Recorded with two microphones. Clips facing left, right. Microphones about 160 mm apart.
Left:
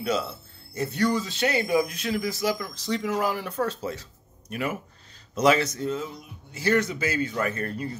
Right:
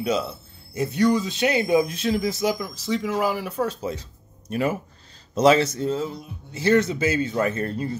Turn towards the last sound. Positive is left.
turn(degrees=-25)  # may be behind; listen again after turning